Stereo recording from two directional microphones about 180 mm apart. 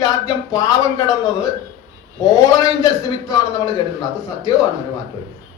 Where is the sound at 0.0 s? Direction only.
20° left (ahead or behind).